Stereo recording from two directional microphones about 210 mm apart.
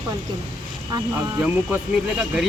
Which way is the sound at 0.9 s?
20° right (ahead or behind).